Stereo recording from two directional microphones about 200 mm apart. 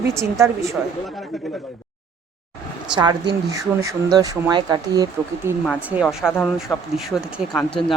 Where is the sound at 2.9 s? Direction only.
20° right (ahead or behind).